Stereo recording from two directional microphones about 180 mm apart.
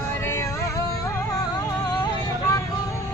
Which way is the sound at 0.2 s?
15° left (ahead or behind).